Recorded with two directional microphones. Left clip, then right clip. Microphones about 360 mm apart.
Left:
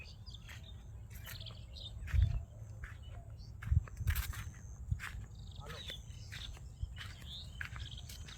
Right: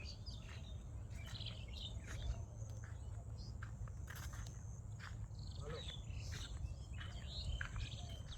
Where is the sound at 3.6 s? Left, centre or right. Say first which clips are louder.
Left 9 dB; left.